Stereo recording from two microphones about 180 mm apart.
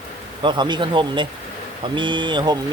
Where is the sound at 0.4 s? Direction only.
25° right (ahead or behind).